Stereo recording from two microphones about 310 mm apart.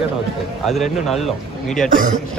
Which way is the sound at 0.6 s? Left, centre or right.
Centre.